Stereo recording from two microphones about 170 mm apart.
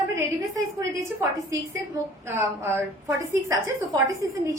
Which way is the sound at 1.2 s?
20° right (ahead or behind).